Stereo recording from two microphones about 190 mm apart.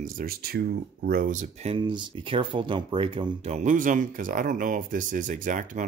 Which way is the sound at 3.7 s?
40° right (ahead or behind).